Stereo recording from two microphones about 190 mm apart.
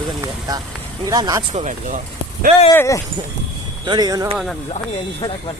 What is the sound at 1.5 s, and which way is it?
Speech, 40° right (ahead or behind).